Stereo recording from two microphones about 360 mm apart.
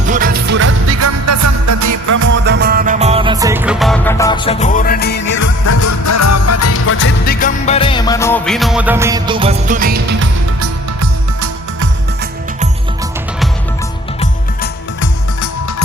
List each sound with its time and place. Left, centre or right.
0.1 s music: right
2.2 s music: right; by 5.5 s left
5.6 s music: left; by 10.7 s right
11.0 s music: right